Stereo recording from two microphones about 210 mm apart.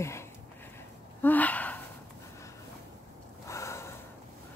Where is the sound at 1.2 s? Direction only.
10° left (ahead or behind).